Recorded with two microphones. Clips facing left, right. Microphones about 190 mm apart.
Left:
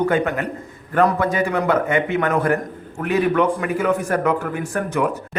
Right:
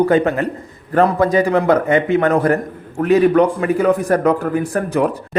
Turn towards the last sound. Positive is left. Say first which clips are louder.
# right 4 dB
turn(degrees=-35)  # may be behind; listen again after turning